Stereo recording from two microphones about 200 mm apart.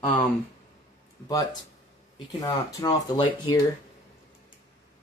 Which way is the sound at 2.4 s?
20° left (ahead or behind).